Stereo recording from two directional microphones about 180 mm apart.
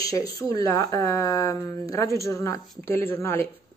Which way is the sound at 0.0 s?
20° left (ahead or behind).